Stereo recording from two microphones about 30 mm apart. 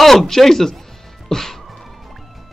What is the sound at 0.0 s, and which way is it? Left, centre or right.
Speech, centre.